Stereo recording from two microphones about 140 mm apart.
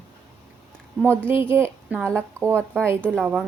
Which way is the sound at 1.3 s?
20° right (ahead or behind).